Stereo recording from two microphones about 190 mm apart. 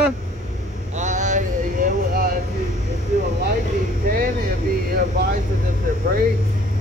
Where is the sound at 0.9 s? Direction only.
40° right (ahead or behind).